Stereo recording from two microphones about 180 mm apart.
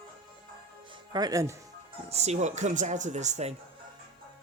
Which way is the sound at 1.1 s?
20° right (ahead or behind).